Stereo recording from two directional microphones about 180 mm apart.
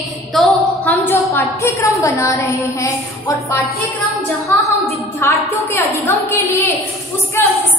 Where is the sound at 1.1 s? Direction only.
10° left (ahead or behind).